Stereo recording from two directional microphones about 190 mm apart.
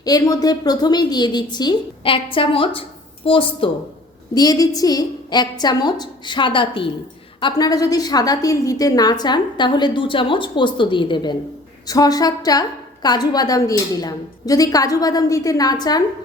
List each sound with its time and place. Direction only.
0.0 s a woman's voice: 20° left (ahead or behind)